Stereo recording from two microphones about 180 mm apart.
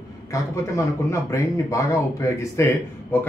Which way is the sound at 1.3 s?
15° left (ahead or behind).